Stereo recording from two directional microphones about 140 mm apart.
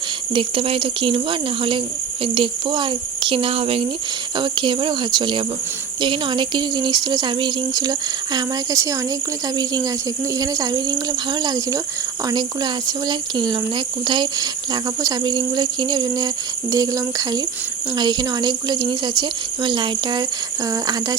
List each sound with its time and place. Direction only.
0.3 s speech: 40° right (ahead or behind)